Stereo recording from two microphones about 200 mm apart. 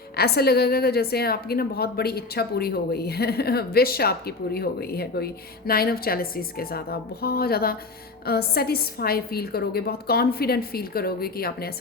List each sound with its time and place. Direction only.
0.2 s a woman's voice: 50° left (ahead or behind)